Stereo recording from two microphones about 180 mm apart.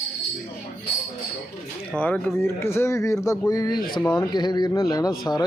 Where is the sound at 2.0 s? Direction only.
10° left (ahead or behind).